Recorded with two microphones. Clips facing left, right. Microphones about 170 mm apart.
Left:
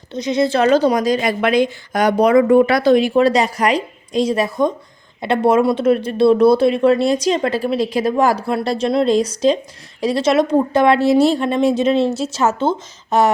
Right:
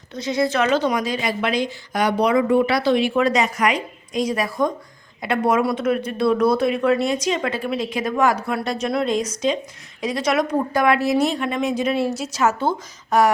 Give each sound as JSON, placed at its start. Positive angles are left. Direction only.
{"t": 0.1, "sound": "a woman's voice", "side_deg": 20}
{"t": 3.2, "sound": "a woman's voice", "side_deg": 35}